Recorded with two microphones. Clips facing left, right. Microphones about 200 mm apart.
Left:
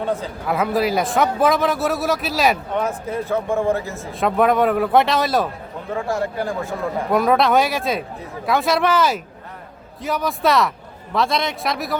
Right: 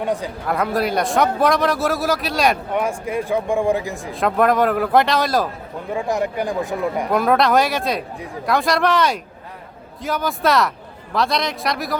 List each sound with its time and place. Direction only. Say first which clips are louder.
0.0 s speech: right 1 dB; 15° right (ahead or behind)
0.4 s a man's voice: left 1 dB; centre (ahead or behind)
2.7 s speech: right 1 dB; 10° right (ahead or behind)
4.1 s a man's voice: even; centre (ahead or behind)
5.9 s speech: right 1 dB; 15° right (ahead or behind)
7.1 s a man's voice: left 1 dB; centre (ahead or behind)